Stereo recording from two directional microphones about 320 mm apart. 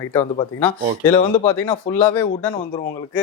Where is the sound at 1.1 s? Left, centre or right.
Centre.